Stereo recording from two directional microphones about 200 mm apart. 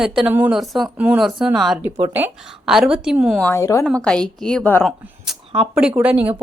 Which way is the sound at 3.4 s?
10° left (ahead or behind).